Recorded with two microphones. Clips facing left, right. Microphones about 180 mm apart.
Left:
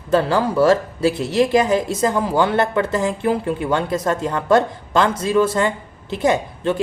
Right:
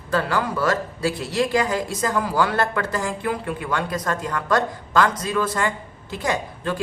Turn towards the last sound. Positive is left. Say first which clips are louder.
# left 6 dB
turn(degrees=25)  # may be behind; listen again after turning